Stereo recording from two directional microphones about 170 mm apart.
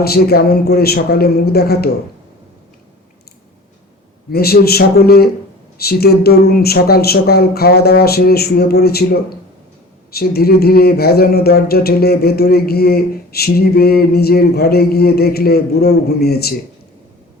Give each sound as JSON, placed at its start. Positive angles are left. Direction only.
{"t": 0.0, "sound": "speech", "side_deg": 65}
{"t": 4.3, "sound": "speech", "side_deg": 65}